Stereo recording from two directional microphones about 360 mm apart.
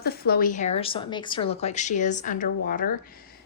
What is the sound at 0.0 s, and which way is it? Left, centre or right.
A woman's voice, left.